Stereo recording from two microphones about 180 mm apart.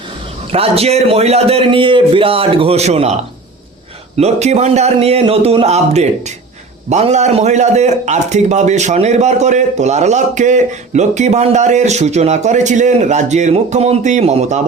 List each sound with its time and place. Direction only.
0.5 s a man's voice: 35° right (ahead or behind)
4.2 s a man's voice: 35° right (ahead or behind)